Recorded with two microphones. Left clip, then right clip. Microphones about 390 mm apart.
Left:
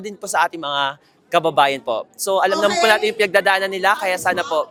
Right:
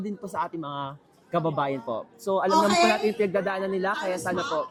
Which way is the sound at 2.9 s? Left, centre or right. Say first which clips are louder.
Left 8 dB; left.